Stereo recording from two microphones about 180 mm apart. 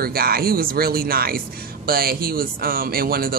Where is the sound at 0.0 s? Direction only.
55° right (ahead or behind).